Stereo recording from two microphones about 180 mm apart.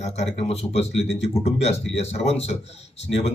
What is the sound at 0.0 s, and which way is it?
A man's voice, 35° left (ahead or behind).